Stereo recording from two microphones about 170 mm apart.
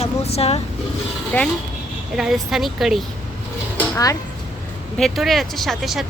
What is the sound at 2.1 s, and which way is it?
Speech, 5° right (ahead or behind).